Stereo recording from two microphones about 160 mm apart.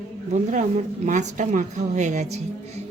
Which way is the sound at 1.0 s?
50° right (ahead or behind).